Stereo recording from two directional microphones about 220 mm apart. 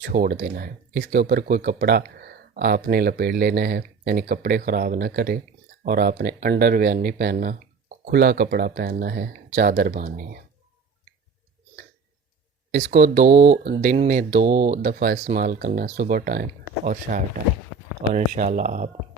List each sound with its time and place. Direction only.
0.0 s speech: 40° right (ahead or behind)
12.7 s speech: 40° right (ahead or behind)